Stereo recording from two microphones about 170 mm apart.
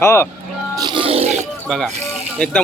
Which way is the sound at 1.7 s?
5° left (ahead or behind).